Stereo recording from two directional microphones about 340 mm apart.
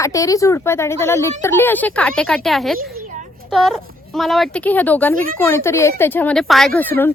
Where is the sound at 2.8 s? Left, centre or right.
Right.